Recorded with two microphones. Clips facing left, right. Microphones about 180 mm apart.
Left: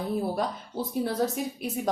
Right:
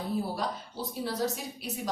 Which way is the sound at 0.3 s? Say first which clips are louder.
Left 4 dB; 55° left (ahead or behind).